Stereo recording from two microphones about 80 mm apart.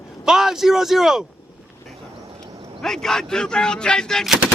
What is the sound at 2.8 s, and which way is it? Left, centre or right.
Speech, centre.